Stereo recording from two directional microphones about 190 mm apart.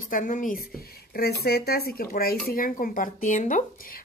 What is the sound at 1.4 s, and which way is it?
Speech, 55° left (ahead or behind).